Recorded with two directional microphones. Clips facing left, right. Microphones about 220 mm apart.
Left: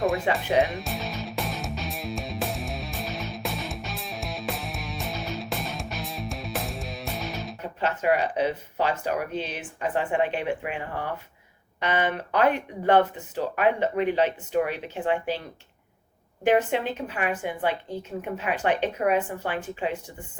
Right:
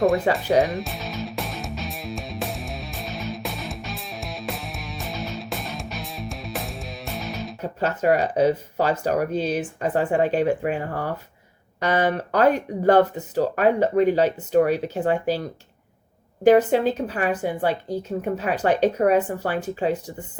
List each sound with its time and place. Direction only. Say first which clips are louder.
0.0 s speech: right 6 dB; centre (ahead or behind)
0.6 s music: right 2 dB; centre (ahead or behind)
7.6 s a woman's voice: right 4 dB; 40° right (ahead or behind)